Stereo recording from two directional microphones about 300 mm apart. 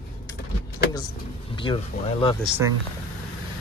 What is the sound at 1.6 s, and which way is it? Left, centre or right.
Speech, centre.